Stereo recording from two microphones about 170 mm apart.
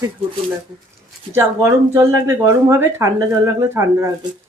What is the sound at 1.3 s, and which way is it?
Speech, 15° right (ahead or behind).